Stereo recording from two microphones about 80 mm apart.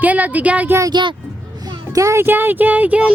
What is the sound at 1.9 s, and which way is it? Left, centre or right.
Speech, right.